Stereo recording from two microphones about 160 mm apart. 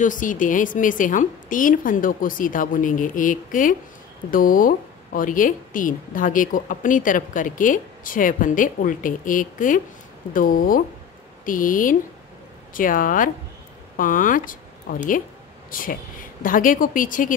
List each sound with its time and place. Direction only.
0.0 s speech: 55° left (ahead or behind)